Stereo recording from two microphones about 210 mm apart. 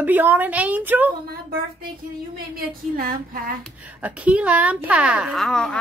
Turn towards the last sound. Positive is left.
turn(degrees=5)  # may be behind; listen again after turning